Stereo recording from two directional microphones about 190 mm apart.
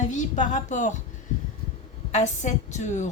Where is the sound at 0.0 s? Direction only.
40° left (ahead or behind).